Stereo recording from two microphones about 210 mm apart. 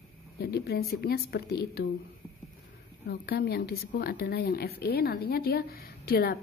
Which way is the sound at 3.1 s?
50° left (ahead or behind).